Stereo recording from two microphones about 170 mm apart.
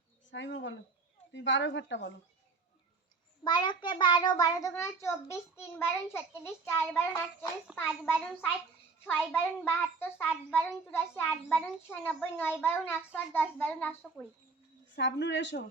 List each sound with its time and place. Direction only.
0.3 s a woman's voice: 90° left
3.4 s a child's voice: 25° left (ahead or behind)
8.0 s a child's voice: 15° left (ahead or behind)
14.9 s a woman's voice: 90° left